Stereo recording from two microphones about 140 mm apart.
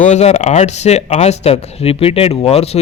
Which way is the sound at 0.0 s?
55° left (ahead or behind).